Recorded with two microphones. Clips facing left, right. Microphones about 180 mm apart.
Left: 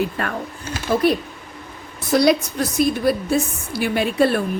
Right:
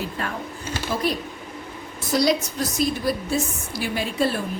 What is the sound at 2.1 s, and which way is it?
A woman's voice, 60° left (ahead or behind).